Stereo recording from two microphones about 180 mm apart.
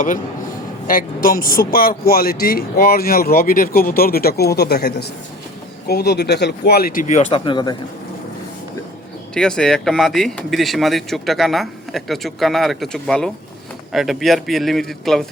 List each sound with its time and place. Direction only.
0.9 s a man's voice: 50° left (ahead or behind)
7.4 s speech: 25° left (ahead or behind)
9.3 s speech: 5° left (ahead or behind)